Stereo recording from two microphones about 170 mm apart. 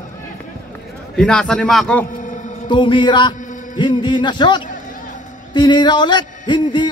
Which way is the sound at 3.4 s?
50° left (ahead or behind).